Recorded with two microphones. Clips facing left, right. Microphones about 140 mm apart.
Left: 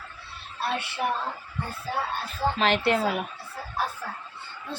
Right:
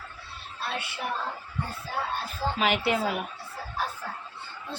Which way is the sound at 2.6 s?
5° right (ahead or behind).